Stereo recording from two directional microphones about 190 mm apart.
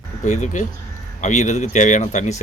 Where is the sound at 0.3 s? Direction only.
40° left (ahead or behind).